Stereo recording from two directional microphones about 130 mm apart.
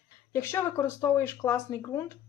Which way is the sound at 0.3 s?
20° left (ahead or behind).